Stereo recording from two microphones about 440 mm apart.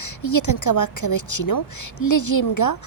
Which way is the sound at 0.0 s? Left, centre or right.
Left.